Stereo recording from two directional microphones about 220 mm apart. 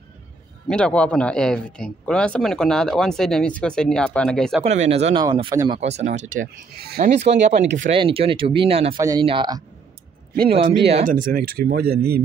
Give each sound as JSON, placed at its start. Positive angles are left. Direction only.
{"t": 0.7, "sound": "speech", "side_deg": 5}
{"t": 4.6, "sound": "speech", "side_deg": -30}
{"t": 7.1, "sound": "speech", "side_deg": -30}
{"t": 8.0, "sound": "speech", "side_deg": -25}
{"t": 10.3, "sound": "speech", "side_deg": -40}
{"t": 10.9, "sound": "speech", "side_deg": -35}